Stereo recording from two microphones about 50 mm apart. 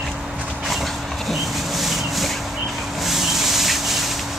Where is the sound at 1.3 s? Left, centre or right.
Centre.